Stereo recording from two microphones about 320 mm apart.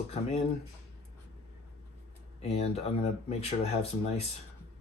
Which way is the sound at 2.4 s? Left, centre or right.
Centre.